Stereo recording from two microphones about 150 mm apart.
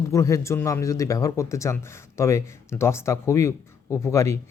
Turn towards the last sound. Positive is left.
turn(degrees=20)  # may be behind; listen again after turning